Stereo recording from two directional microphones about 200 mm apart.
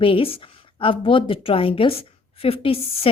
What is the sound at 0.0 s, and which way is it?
Speech, 25° left (ahead or behind).